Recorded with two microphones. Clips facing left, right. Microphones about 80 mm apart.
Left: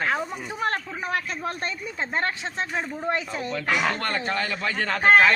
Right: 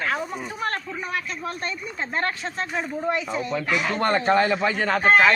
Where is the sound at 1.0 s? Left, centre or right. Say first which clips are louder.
Left 1 dB; left.